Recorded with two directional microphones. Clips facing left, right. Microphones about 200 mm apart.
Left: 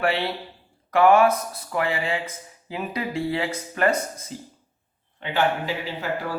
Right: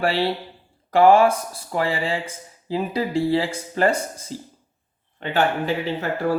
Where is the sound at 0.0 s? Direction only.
30° right (ahead or behind).